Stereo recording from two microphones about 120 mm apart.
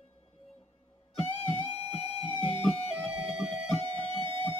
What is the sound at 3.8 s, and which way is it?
Music, 45° right (ahead or behind).